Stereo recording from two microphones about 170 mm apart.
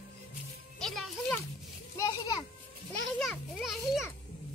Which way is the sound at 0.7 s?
Centre (ahead or behind).